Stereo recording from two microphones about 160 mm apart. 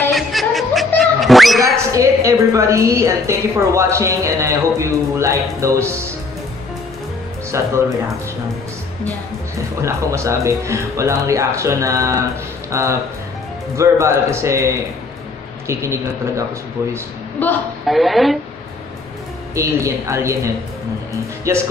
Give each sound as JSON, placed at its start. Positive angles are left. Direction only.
{"t": 0.1, "sound": "music", "side_deg": 0}
{"t": 0.9, "sound": "cat", "side_deg": 0}
{"t": 1.9, "sound": "a woman's voice", "side_deg": -20}
{"t": 7.5, "sound": "a woman's voice", "side_deg": -20}
{"t": 9.8, "sound": "a woman's voice", "side_deg": -20}
{"t": 17.4, "sound": "a woman's voice", "side_deg": 10}
{"t": 17.8, "sound": "speech", "side_deg": 0}
{"t": 19.5, "sound": "a woman's voice", "side_deg": -20}